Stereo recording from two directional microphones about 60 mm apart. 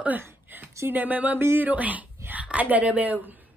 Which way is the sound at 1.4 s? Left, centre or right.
Right.